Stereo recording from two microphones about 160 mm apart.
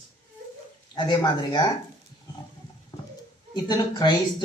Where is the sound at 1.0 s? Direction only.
25° left (ahead or behind).